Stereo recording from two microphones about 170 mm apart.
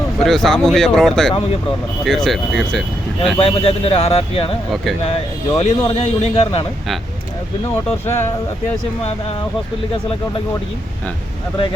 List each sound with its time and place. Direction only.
0.3 s speech: centre (ahead or behind)
3.3 s a man's voice: 35° left (ahead or behind)
5.5 s a man's voice: 40° left (ahead or behind)
7.9 s speech: 15° left (ahead or behind)